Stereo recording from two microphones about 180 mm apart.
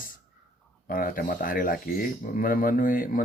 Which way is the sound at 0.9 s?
50° left (ahead or behind).